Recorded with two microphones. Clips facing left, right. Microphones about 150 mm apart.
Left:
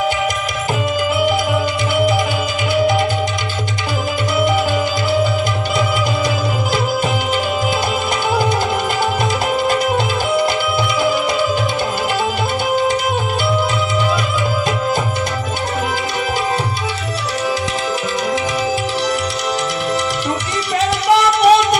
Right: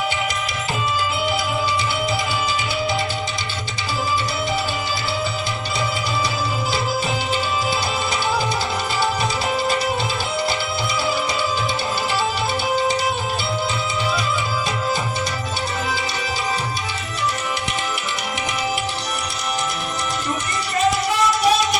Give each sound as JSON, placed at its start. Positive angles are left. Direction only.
{"t": 10.3, "sound": "music", "side_deg": 50}
{"t": 20.7, "sound": "music", "side_deg": 75}